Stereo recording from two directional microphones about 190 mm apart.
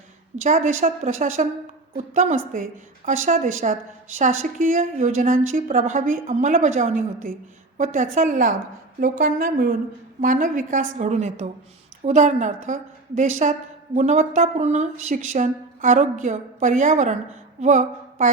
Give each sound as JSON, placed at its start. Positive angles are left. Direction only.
{"t": 0.4, "sound": "a woman's voice", "side_deg": -40}